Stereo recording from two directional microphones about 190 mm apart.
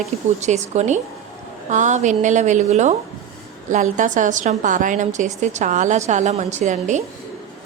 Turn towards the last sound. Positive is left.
turn(degrees=-40)  # may be behind; listen again after turning